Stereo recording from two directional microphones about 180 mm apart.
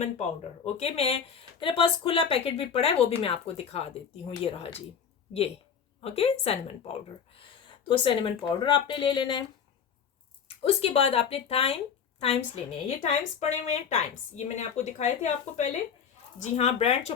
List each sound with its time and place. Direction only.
0.0 s speech: 35° left (ahead or behind)
6.0 s speech: 35° left (ahead or behind)
10.6 s speech: 35° left (ahead or behind)
13.0 s speech: 40° left (ahead or behind)